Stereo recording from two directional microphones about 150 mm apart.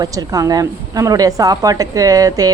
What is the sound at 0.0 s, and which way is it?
A woman's voice, 25° right (ahead or behind).